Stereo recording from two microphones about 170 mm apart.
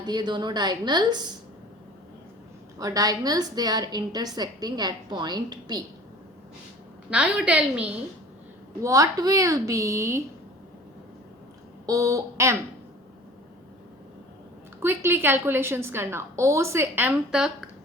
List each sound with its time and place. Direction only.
0.0 s a woman's voice: 25° right (ahead or behind)
2.7 s a woman's voice: 20° right (ahead or behind)
7.1 s a woman's voice: 5° right (ahead or behind)
8.8 s a woman's voice: 20° right (ahead or behind)
11.9 s a woman's voice: 20° right (ahead or behind)
14.8 s a woman's voice: 15° right (ahead or behind)